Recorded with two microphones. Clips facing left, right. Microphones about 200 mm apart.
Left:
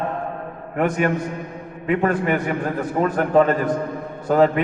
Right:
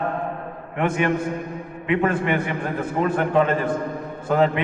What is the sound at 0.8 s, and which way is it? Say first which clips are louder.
A man's voice: left 1 dB; 40° left (ahead or behind).